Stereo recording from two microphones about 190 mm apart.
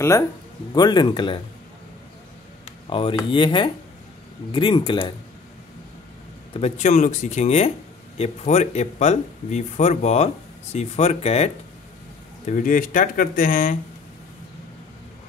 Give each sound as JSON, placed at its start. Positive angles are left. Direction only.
{"t": 0.7, "sound": "speech", "side_deg": 20}
{"t": 2.9, "sound": "speech", "side_deg": 25}
{"t": 6.5, "sound": "speech", "side_deg": 35}
{"t": 12.4, "sound": "speech", "side_deg": 45}